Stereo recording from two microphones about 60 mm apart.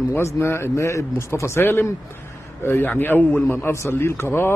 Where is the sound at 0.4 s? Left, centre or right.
Left.